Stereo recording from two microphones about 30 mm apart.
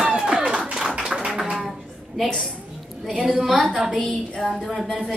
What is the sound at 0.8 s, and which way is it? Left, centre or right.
Clapping, centre.